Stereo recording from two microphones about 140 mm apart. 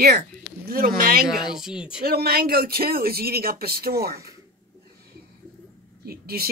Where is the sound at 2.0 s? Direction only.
90° right.